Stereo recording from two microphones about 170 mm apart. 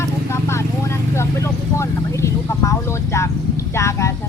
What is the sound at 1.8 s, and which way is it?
Speech, 15° left (ahead or behind).